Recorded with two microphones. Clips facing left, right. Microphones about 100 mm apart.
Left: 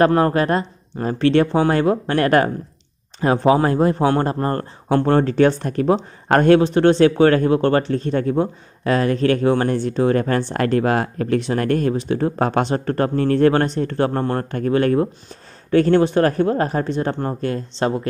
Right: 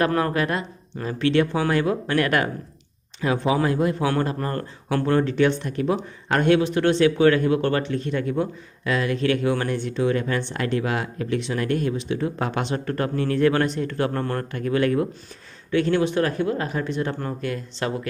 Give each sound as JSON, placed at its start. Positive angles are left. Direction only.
{"t": 0.0, "sound": "speech", "side_deg": 35}